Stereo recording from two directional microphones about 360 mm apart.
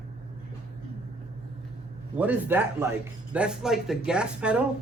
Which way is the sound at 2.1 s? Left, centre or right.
Centre.